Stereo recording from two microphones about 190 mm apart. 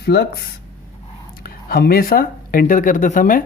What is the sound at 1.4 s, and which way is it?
Speech, 55° left (ahead or behind).